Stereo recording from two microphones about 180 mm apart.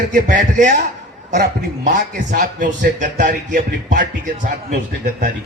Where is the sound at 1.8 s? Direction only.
50° right (ahead or behind).